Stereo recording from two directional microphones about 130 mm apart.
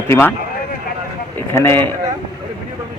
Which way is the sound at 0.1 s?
15° left (ahead or behind).